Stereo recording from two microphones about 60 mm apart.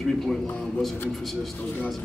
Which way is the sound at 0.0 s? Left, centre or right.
Centre.